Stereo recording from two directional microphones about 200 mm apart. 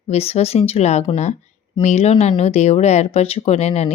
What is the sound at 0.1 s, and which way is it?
Speech, 30° left (ahead or behind).